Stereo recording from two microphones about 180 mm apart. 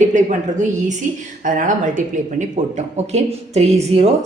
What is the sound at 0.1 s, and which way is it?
A woman's voice, 45° right (ahead or behind).